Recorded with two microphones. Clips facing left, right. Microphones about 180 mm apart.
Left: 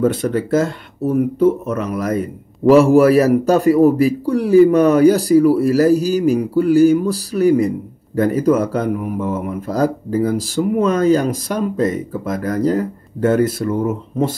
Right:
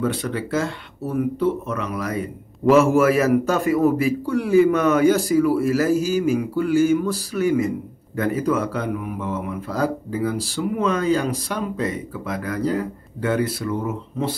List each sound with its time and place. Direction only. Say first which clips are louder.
0.0 s a man's voice: left 7 dB; 45° left (ahead or behind)